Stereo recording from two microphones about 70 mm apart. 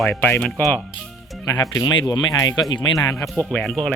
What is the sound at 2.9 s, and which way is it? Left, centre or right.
Speech, left.